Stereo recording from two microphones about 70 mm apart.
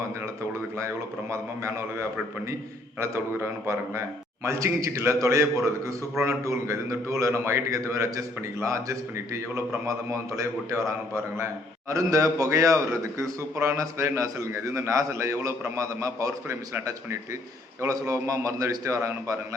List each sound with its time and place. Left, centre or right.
1.3 s a man's voice: right
17.8 s a man's voice: right